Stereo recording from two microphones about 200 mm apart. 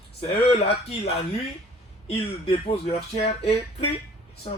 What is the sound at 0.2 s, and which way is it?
Speech, 30° left (ahead or behind).